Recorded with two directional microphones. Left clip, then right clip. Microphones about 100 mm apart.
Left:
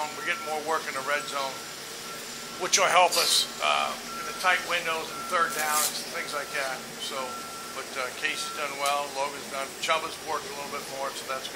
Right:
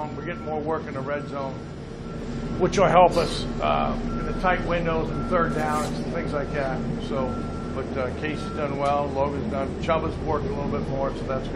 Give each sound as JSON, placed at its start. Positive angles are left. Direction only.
{"t": 0.7, "sound": "speech", "side_deg": -30}
{"t": 2.7, "sound": "speech", "side_deg": -20}
{"t": 5.6, "sound": "speech", "side_deg": -40}
{"t": 6.1, "sound": "speech", "side_deg": -25}
{"t": 10.7, "sound": "speech", "side_deg": -30}